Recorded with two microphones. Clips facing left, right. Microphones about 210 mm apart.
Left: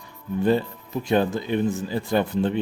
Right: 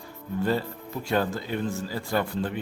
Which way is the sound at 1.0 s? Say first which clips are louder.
Left 5 dB; 20° left (ahead or behind).